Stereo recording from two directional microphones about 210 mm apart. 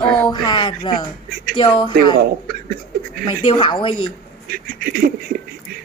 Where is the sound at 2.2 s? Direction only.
45° right (ahead or behind).